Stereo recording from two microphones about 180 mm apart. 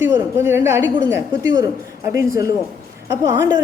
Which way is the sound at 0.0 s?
15° right (ahead or behind).